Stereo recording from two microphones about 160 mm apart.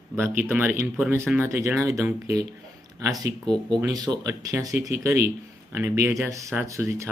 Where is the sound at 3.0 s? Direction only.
20° right (ahead or behind).